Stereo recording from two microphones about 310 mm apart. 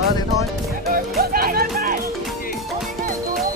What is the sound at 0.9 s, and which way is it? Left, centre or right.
Music, right.